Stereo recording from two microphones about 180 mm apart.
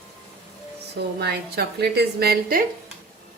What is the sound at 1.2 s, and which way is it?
A woman's voice, 65° right (ahead or behind).